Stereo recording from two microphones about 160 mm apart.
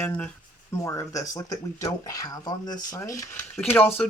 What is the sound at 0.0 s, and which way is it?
Speech, 10° left (ahead or behind).